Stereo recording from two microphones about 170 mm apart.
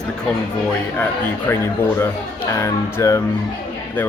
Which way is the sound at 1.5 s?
10° left (ahead or behind).